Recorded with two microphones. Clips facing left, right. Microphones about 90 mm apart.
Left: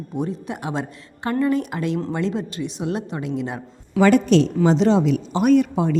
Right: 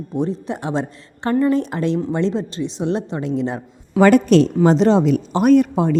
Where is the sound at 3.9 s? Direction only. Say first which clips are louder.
Right 3 dB; 45° right (ahead or behind).